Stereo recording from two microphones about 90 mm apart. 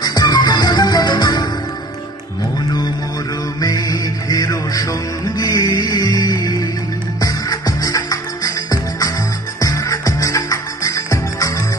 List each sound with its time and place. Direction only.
0.0 s music: 50° left (ahead or behind)
3.6 s music: 45° left (ahead or behind)